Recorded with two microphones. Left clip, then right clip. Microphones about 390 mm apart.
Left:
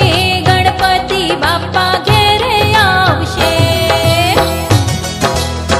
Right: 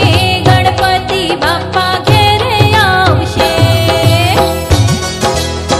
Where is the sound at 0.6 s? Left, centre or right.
Right.